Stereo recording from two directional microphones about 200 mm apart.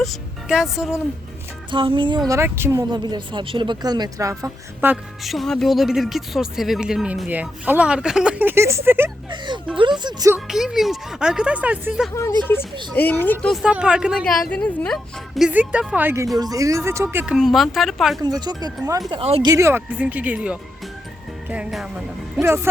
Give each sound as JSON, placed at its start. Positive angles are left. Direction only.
{"t": 0.0, "sound": "a woman's voice", "side_deg": 0}
{"t": 1.7, "sound": "speech", "side_deg": -25}
{"t": 9.7, "sound": "speech", "side_deg": -25}
{"t": 10.3, "sound": "a woman's voice", "side_deg": 0}
{"t": 12.9, "sound": "a woman's voice", "side_deg": 10}
{"t": 18.2, "sound": "speech", "side_deg": -20}
{"t": 19.2, "sound": "speech", "side_deg": -30}
{"t": 19.5, "sound": "a woman's voice", "side_deg": -15}